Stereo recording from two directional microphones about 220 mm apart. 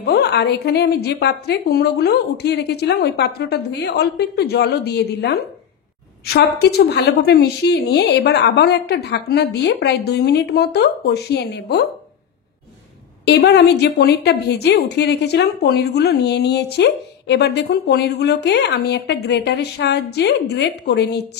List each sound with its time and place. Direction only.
0.0 s a woman's voice: 45° left (ahead or behind)
13.2 s a woman's voice: 50° left (ahead or behind)